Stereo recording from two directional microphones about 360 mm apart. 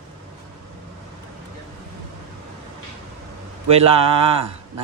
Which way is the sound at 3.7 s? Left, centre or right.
Centre.